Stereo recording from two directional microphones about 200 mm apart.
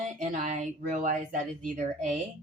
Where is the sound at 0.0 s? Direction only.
40° right (ahead or behind).